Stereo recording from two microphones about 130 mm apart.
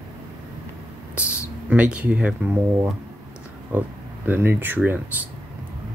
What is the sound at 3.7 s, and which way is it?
Speech, 15° right (ahead or behind).